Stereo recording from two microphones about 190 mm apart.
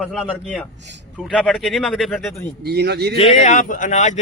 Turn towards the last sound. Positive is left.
turn(degrees=35)  # may be behind; listen again after turning